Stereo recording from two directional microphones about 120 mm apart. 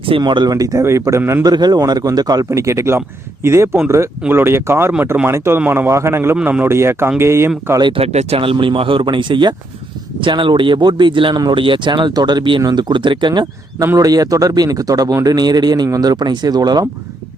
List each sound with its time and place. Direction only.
0.2 s speech: 40° right (ahead or behind); by 1.5 s 20° right (ahead or behind)
1.5 s speech: 35° right (ahead or behind)
7.8 s speech: 45° right (ahead or behind)